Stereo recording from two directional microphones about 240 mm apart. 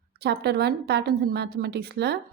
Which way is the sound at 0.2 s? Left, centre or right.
Right.